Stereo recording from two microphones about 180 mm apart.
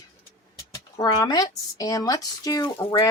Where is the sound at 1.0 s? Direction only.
20° left (ahead or behind).